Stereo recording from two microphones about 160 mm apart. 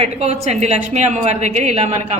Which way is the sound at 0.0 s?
40° right (ahead or behind).